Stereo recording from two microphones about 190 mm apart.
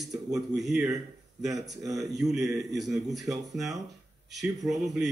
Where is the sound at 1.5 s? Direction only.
20° right (ahead or behind).